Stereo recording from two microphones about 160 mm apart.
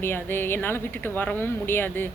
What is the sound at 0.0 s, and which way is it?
Speech, 15° left (ahead or behind).